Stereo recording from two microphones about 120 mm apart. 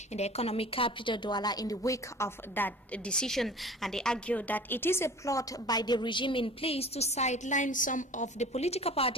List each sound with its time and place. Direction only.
0.1 s a woman's voice: 65° left (ahead or behind)